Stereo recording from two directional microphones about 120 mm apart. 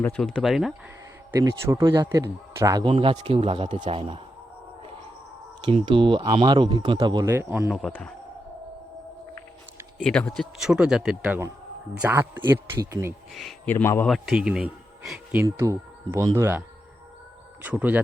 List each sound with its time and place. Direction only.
0.2 s speech: 5° left (ahead or behind)
1.3 s speech: 25° right (ahead or behind)
2.8 s speech: 50° right (ahead or behind)
5.6 s speech: 45° right (ahead or behind)
7.3 s speech: 20° right (ahead or behind)
7.7 s speech: 5° left (ahead or behind)
10.0 s a man's voice: 5° left (ahead or behind)
10.6 s speech: 5° right (ahead or behind)
11.2 s a man's voice: 20° right (ahead or behind)
12.4 s speech: 30° right (ahead or behind)
13.3 s speech: centre (ahead or behind)
13.7 s a man's voice: 20° left (ahead or behind)
14.1 s speech: 5° right (ahead or behind)
15.4 s a man's voice: 25° right (ahead or behind)